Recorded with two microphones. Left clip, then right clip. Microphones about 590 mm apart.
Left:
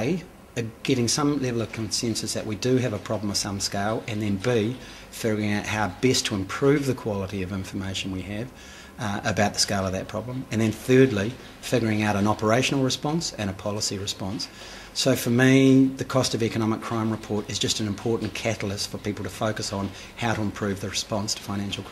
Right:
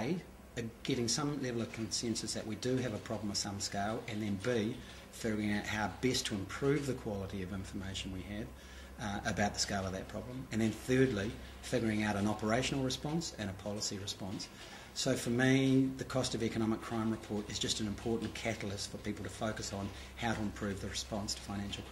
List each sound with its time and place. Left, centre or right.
0.0 s speech: left